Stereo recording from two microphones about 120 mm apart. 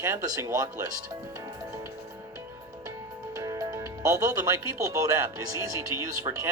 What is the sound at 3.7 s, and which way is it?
Speech, 25° right (ahead or behind).